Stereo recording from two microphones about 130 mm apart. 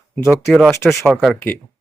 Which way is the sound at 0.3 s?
Centre (ahead or behind).